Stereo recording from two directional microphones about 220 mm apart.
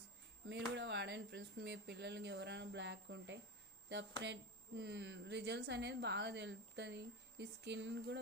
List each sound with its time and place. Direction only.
0.4 s speech: 50° right (ahead or behind)
4.8 s a woman's voice: 50° right (ahead or behind)